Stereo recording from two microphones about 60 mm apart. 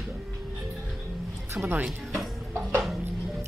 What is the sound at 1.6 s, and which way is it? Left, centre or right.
Music, right.